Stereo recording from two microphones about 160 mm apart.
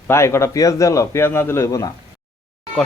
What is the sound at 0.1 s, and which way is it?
A man's voice, 15° left (ahead or behind).